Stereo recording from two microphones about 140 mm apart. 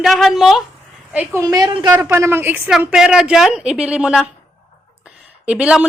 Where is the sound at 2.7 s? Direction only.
5° right (ahead or behind).